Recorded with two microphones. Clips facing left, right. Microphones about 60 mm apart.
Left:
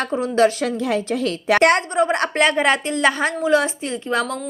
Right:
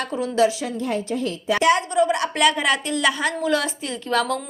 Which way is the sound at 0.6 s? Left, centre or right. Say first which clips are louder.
Left 4 dB; left.